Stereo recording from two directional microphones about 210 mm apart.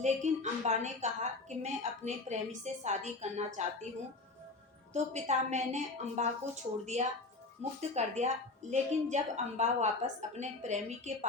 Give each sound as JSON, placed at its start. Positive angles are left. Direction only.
{"t": 0.0, "sound": "a woman's voice", "side_deg": -35}
{"t": 4.9, "sound": "a woman's voice", "side_deg": -35}